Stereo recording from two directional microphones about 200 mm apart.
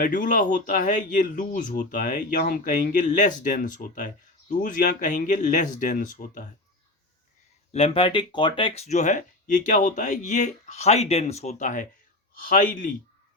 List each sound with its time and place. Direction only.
0.0 s speech: 40° left (ahead or behind)
7.7 s speech: 30° left (ahead or behind)